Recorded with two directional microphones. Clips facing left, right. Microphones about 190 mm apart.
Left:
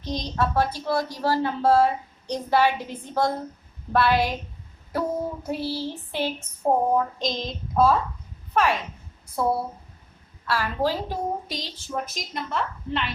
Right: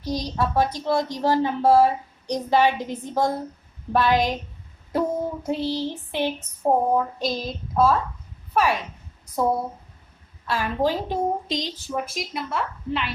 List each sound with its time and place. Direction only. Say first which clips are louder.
0.0 s a woman's voice: right 1 dB; 10° right (ahead or behind)
5.5 s a woman's voice: right 3 dB; 20° right (ahead or behind)
11.9 s a woman's voice: left 1 dB; 5° right (ahead or behind)